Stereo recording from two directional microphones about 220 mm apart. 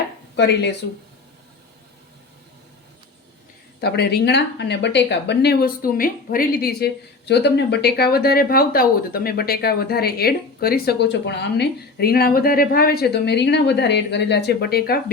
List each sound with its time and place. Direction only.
0.3 s speech: 50° left (ahead or behind)
3.8 s speech: 50° left (ahead or behind)